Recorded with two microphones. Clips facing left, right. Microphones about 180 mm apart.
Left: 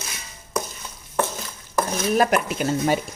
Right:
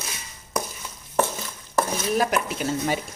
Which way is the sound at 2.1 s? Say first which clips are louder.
Left 4 dB; 55° left (ahead or behind).